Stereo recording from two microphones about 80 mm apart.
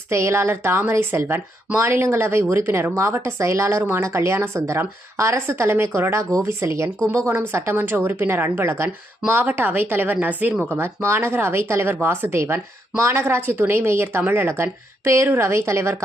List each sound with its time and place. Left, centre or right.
0.1 s a woman's voice: right